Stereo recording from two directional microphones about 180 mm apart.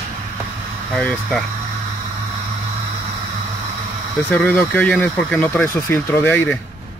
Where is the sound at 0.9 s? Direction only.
5° left (ahead or behind).